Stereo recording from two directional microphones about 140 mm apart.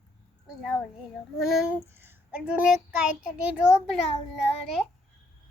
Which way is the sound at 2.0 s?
15° right (ahead or behind).